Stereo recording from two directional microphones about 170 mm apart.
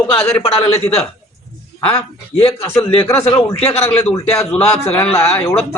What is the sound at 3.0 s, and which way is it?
Speech, 10° left (ahead or behind).